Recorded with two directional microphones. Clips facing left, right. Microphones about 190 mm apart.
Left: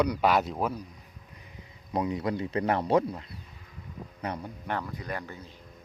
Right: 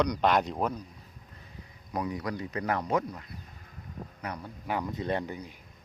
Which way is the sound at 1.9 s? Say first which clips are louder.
Left 4 dB; 25° left (ahead or behind).